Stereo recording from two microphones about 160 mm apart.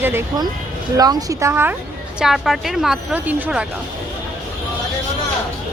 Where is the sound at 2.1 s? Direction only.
5° right (ahead or behind).